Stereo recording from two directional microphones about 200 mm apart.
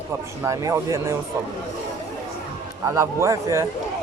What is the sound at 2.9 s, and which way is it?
Speech, 15° right (ahead or behind).